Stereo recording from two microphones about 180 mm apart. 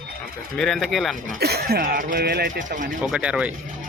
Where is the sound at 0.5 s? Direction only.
5° left (ahead or behind).